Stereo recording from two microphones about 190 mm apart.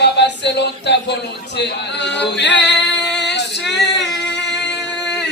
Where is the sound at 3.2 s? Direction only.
65° left (ahead or behind).